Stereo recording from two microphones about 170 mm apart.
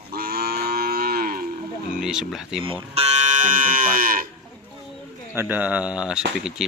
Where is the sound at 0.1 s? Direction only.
65° right (ahead or behind).